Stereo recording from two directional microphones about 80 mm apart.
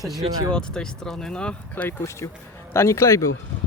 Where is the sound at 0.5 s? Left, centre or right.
Centre.